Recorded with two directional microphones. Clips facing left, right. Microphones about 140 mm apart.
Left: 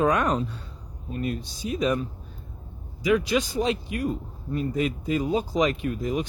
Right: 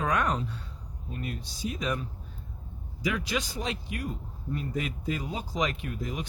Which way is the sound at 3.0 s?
20° left (ahead or behind).